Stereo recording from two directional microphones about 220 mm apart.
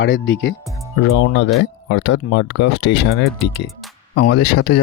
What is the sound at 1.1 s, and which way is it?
Speech, 55° left (ahead or behind).